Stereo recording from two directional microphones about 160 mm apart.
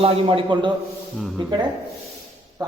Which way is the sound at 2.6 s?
25° right (ahead or behind).